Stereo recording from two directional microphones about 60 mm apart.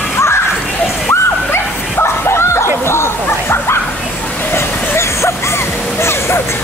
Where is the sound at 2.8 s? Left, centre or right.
Left.